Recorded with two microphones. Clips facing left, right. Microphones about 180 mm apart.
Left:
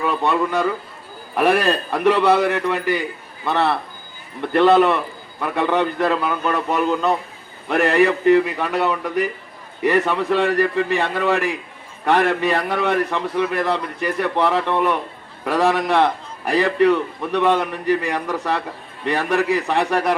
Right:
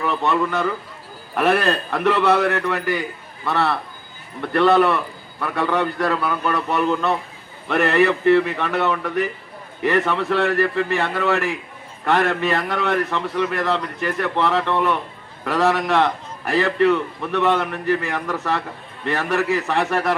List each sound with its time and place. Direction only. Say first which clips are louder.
0.0 s a man's voice: left 1 dB; 15° left (ahead or behind)